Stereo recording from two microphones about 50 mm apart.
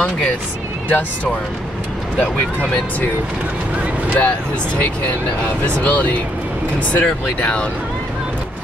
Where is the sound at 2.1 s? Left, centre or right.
Centre.